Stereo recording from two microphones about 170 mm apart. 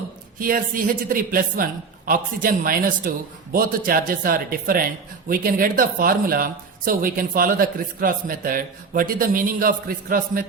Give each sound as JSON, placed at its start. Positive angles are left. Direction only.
{"t": 0.3, "sound": "speech", "side_deg": -55}